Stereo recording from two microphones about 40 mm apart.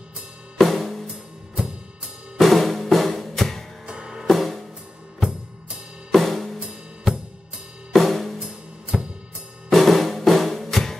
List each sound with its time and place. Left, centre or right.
0.6 s drum kit: centre
2.3 s drum: centre
3.8 s music: centre
4.3 s drum kit: centre
6.1 s drum kit: centre
7.1 s drum kit: centre
7.9 s drum kit: centre
8.4 s music: right
9.7 s music: centre